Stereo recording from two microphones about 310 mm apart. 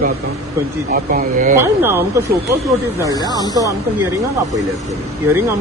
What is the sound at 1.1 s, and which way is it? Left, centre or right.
Speech, right.